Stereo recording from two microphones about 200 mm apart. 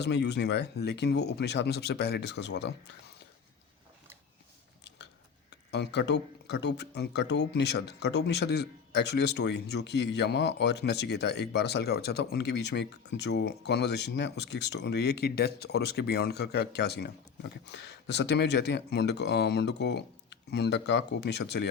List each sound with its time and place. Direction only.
0.0 s speech: 60° left (ahead or behind)
5.7 s speech: 60° left (ahead or behind)